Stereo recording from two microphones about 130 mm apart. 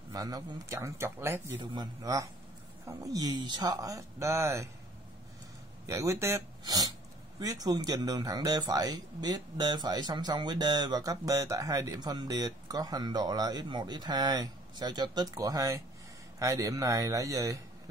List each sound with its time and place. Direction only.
0.1 s speech: 30° right (ahead or behind)
1.7 s speech: 30° right (ahead or behind)
5.9 s speech: 25° right (ahead or behind)